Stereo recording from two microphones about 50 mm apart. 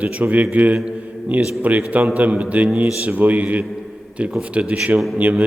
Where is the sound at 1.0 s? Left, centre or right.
Right.